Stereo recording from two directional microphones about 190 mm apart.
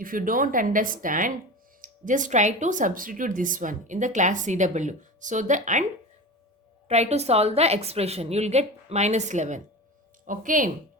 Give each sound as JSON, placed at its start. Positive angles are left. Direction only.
{"t": 0.0, "sound": "speech", "side_deg": -45}
{"t": 6.8, "sound": "speech", "side_deg": -35}